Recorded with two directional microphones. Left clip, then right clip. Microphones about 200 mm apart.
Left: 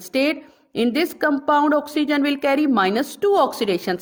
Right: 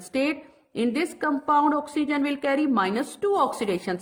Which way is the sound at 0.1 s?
45° left (ahead or behind).